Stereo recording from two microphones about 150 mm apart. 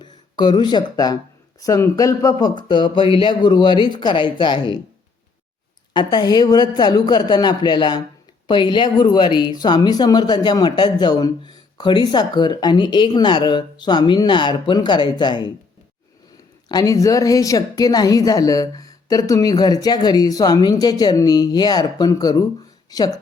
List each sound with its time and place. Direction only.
0.0 s speech: 30° left (ahead or behind)
5.9 s speech: 30° left (ahead or behind)
16.6 s speech: 25° left (ahead or behind)